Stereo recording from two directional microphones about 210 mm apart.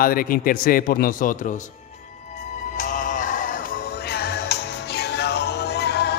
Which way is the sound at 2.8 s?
40° left (ahead or behind).